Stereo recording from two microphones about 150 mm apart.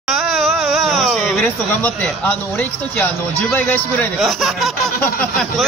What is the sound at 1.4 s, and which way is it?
Speech, 10° left (ahead or behind).